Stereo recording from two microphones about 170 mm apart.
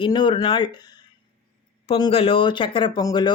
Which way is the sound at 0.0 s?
30° left (ahead or behind).